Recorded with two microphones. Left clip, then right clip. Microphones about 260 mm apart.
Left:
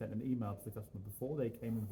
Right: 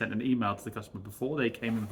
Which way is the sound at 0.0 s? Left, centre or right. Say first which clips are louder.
Right 11 dB; centre.